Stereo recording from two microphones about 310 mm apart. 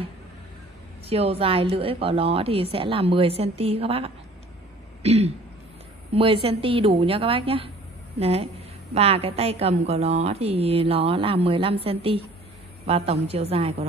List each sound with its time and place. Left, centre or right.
1.0 s a woman's voice: centre
5.0 s throat clearing: right
6.1 s a woman's voice: centre